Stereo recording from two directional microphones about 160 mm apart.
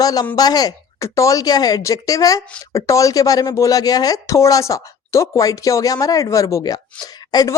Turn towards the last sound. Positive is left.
turn(degrees=25)  # may be behind; listen again after turning